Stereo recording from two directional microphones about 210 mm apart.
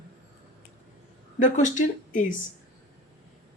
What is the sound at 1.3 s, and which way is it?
Speech, 35° left (ahead or behind).